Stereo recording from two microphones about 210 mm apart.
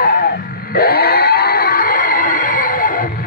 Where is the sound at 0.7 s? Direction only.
45° left (ahead or behind).